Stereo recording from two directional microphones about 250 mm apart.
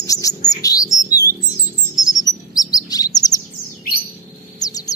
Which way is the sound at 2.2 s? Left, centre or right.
Centre.